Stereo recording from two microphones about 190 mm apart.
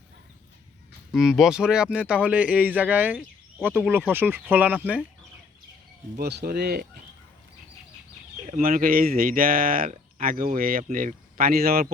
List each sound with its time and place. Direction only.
1.1 s speech: centre (ahead or behind)
6.1 s speech: 55° right (ahead or behind)
8.4 s speech: 45° right (ahead or behind)